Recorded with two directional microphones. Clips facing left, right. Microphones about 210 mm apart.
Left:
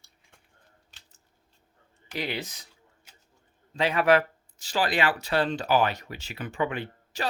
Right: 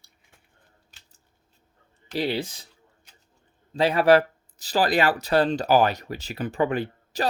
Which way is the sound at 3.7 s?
35° right (ahead or behind).